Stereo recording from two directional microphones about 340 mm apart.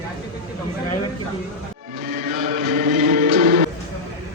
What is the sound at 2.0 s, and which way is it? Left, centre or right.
Music, right.